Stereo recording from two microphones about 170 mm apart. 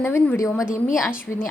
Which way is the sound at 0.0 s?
15° left (ahead or behind).